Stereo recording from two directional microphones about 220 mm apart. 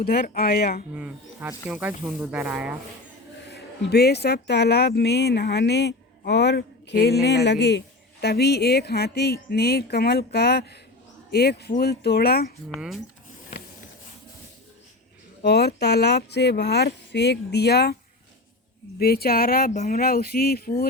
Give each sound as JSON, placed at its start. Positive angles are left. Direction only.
{"t": 0.0, "sound": "speech", "side_deg": 45}
{"t": 0.9, "sound": "speech", "side_deg": -5}
{"t": 3.4, "sound": "speech", "side_deg": 50}
{"t": 12.7, "sound": "speech", "side_deg": 0}
{"t": 15.4, "sound": "speech", "side_deg": 50}
{"t": 18.9, "sound": "speech", "side_deg": 45}